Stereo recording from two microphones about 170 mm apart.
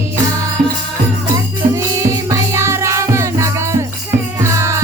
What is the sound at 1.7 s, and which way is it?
Music, 20° right (ahead or behind).